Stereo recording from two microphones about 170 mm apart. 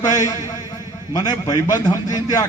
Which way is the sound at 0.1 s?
20° left (ahead or behind).